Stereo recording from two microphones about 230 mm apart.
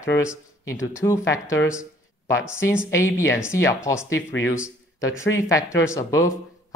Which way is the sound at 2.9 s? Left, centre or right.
Centre.